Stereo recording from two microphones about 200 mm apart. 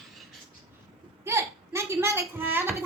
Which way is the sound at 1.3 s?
15° right (ahead or behind).